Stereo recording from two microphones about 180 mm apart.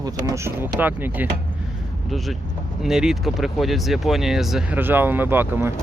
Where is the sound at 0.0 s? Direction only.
15° right (ahead or behind).